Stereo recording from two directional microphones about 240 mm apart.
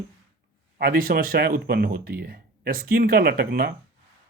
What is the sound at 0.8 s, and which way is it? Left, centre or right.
Speech, right.